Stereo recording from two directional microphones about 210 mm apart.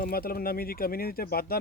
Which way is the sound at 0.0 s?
45° left (ahead or behind).